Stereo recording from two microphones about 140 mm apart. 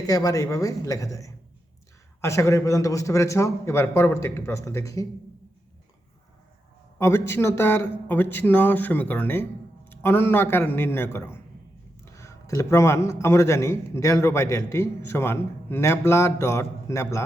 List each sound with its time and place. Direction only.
0.1 s a man's voice: 25° left (ahead or behind)
7.0 s a man's voice: 20° left (ahead or behind)